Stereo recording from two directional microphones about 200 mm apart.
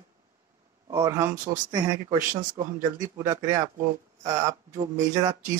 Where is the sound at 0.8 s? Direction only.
15° right (ahead or behind).